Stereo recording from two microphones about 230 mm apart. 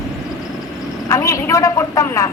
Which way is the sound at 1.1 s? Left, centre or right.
Centre.